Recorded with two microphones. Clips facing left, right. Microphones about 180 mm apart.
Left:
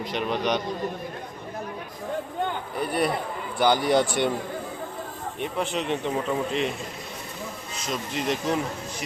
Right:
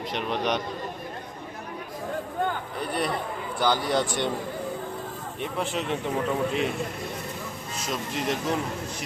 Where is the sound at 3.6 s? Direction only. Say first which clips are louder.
Left 4 dB; 15° left (ahead or behind).